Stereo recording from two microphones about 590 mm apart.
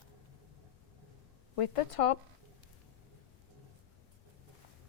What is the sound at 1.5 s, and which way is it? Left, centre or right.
Speech, left.